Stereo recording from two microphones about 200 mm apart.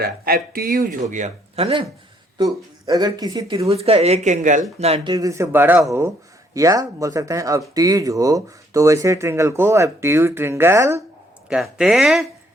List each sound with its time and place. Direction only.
0.0 s speech: 50° right (ahead or behind); by 3.7 s 20° right (ahead or behind)
3.7 s speech: 30° right (ahead or behind)
5.1 s speech: 15° right (ahead or behind)
11.4 s speech: 5° right (ahead or behind)